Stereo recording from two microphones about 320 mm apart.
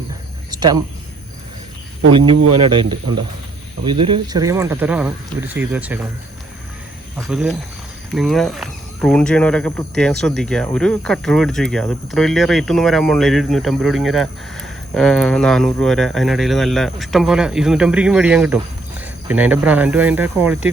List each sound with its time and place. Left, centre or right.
0.5 s speech: centre
2.1 s speech: centre
7.2 s speech: centre